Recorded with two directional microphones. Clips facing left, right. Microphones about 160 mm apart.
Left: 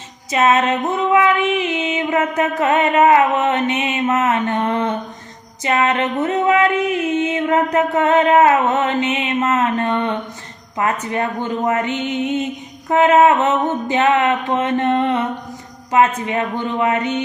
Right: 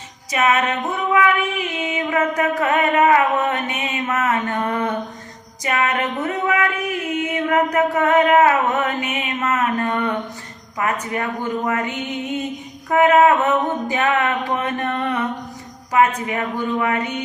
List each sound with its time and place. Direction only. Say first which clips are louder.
0.3 s female singing: left 4 dB; 25° left (ahead or behind)